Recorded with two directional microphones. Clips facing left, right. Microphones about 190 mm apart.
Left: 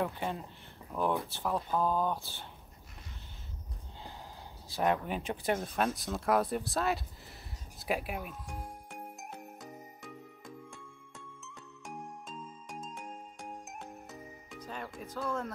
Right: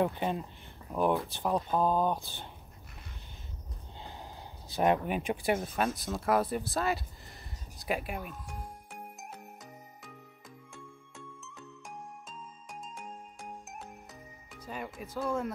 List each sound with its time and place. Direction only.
0.0 s speech: 20° right (ahead or behind)
4.0 s speech: 20° right (ahead or behind); by 8.5 s centre (ahead or behind)
13.4 s music: centre (ahead or behind)